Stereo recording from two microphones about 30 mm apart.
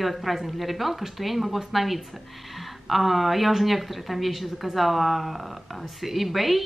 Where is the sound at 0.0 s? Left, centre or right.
Centre.